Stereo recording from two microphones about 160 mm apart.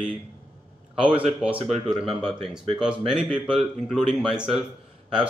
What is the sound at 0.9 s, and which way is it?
Speech, 10° right (ahead or behind).